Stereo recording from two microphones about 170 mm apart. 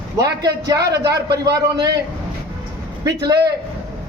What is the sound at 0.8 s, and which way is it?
Speech, 80° right.